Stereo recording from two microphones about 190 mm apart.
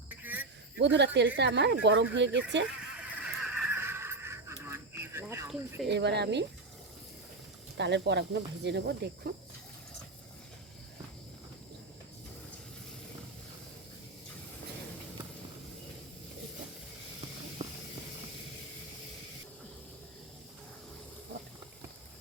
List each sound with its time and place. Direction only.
0.2 s a sound: 10° right (ahead or behind)
0.8 s speech: 65° right (ahead or behind)
2.6 s neigh: 5° right (ahead or behind)
5.5 s speech: centre (ahead or behind)
5.9 s speech: 60° right (ahead or behind)
7.8 s speech: 65° right (ahead or behind)